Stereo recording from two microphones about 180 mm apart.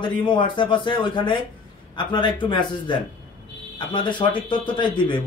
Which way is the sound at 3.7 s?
25° left (ahead or behind).